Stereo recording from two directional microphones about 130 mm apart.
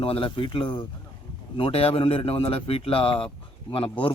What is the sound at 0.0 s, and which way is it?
Speech, 45° left (ahead or behind).